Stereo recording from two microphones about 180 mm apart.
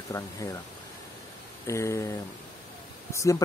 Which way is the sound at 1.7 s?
15° left (ahead or behind).